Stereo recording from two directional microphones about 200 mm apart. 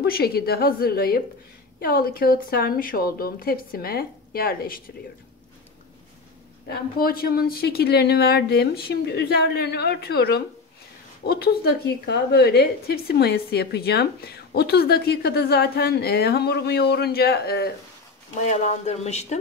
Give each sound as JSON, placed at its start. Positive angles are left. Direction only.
{"t": 0.0, "sound": "a woman's voice", "side_deg": 50}
{"t": 6.7, "sound": "a woman's voice", "side_deg": 50}
{"t": 18.5, "sound": "speech", "side_deg": 35}